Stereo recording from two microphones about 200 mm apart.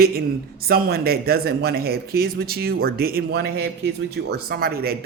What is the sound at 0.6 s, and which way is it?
Speech, 50° right (ahead or behind).